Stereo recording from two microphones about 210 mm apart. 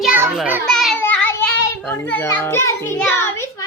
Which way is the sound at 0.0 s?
5° right (ahead or behind).